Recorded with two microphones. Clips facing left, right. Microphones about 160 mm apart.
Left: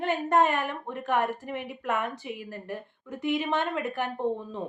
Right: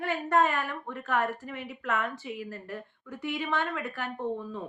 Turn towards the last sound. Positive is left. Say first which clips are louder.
# left 4 dB
turn(degrees=20)  # may be behind; listen again after turning